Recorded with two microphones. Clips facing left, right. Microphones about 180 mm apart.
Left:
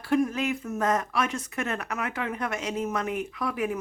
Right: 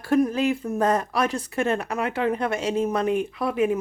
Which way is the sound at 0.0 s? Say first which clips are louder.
Right 4 dB; 40° right (ahead or behind).